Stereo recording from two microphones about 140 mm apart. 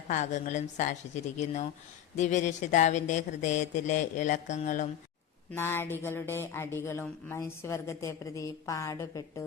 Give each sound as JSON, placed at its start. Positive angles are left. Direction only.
{"t": 0.1, "sound": "speech", "side_deg": 60}
{"t": 5.5, "sound": "a woman's voice", "side_deg": 15}